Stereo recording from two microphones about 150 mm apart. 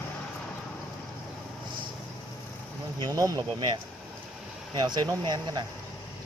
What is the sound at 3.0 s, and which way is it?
Speech, 25° right (ahead or behind).